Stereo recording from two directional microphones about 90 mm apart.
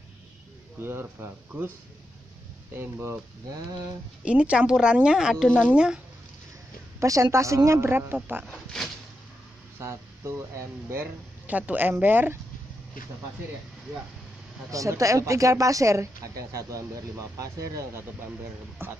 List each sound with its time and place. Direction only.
0.8 s speech: 25° right (ahead or behind)
2.8 s speech: 30° right (ahead or behind)
4.2 s a woman's voice: 10° right (ahead or behind)
7.0 s speech: 35° right (ahead or behind)
8.5 s speech: 5° left (ahead or behind)
9.8 s speech: 30° right (ahead or behind)
11.4 s speech: 15° right (ahead or behind)
14.7 s speech: 35° right (ahead or behind)